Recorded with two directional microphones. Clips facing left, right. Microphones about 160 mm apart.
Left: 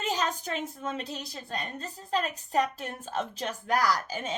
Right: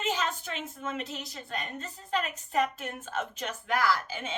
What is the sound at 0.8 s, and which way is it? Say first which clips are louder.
A woman's voice: left 1 dB; 35° left (ahead or behind).